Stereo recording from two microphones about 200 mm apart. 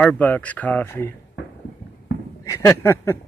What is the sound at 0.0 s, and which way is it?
Speech, 5° left (ahead or behind).